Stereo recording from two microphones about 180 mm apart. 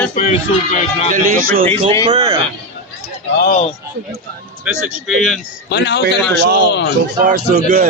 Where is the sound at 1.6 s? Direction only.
30° right (ahead or behind).